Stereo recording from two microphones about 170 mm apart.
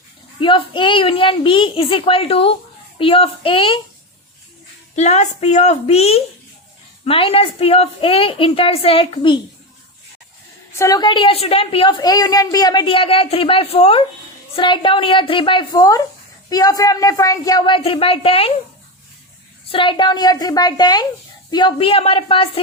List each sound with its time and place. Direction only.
0.3 s a woman's voice: 30° left (ahead or behind)
4.9 s a woman's voice: 40° left (ahead or behind)
10.8 s a woman's voice: 20° left (ahead or behind)
19.7 s a woman's voice: 30° left (ahead or behind)